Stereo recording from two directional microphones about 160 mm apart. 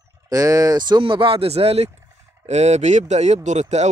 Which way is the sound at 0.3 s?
20° right (ahead or behind).